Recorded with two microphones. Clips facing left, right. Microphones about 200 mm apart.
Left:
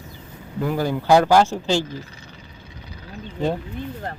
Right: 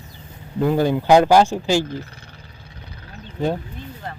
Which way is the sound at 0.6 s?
25° right (ahead or behind).